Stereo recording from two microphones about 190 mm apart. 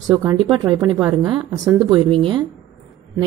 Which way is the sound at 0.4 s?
20° right (ahead or behind).